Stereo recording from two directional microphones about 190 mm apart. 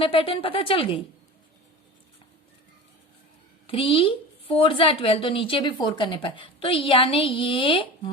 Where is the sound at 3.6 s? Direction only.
30° left (ahead or behind).